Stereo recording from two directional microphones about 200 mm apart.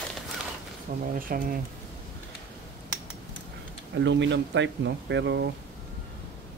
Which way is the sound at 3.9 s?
65° right (ahead or behind).